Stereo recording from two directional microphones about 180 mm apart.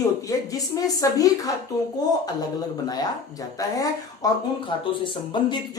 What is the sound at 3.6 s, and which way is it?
Speech, 20° left (ahead or behind).